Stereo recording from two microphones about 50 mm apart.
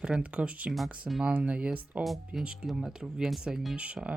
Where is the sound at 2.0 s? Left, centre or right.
Centre.